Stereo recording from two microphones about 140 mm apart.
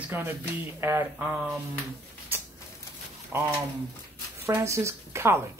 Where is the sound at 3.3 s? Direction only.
15° right (ahead or behind).